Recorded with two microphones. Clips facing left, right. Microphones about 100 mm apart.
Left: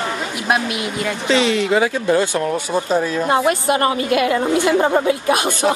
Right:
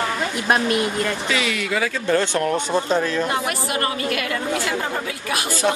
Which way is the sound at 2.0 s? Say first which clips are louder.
Left 3 dB; 10° left (ahead or behind).